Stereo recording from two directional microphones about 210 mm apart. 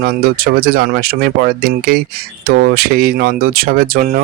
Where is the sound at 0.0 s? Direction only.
45° right (ahead or behind).